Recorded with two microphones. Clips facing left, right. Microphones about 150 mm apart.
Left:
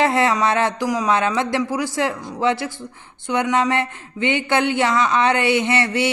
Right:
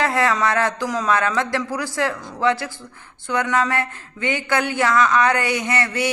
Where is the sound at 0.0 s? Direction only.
20° left (ahead or behind).